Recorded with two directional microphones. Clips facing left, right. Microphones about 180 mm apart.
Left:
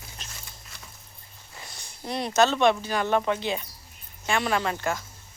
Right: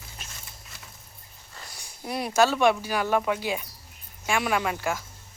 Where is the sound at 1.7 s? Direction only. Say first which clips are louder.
Even; 10° right (ahead or behind).